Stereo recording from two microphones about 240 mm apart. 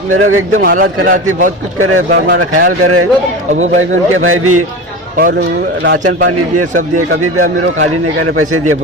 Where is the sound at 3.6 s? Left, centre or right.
Right.